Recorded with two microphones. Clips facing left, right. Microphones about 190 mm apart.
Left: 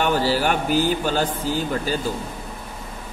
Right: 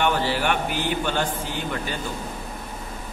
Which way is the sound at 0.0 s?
40° left (ahead or behind).